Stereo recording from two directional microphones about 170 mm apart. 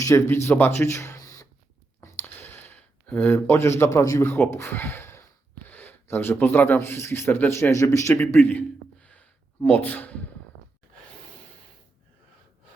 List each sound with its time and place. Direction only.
0.0 s speech: 20° left (ahead or behind)
2.0 s a sound: 15° left (ahead or behind)
5.6 s speech: 10° left (ahead or behind)